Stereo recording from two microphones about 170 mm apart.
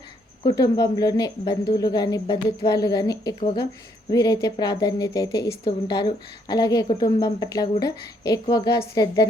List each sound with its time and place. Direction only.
0.4 s a woman's voice: 25° left (ahead or behind)